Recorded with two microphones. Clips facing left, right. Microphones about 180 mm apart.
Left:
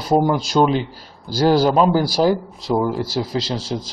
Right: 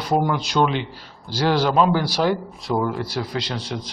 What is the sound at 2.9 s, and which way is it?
Speech, 5° left (ahead or behind).